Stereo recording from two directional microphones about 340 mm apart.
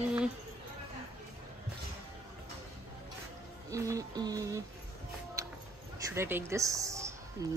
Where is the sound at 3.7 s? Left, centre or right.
Centre.